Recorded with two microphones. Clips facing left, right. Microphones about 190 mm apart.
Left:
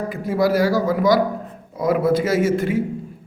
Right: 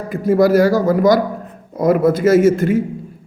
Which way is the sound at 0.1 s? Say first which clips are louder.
Right 8 dB; 45° right (ahead or behind).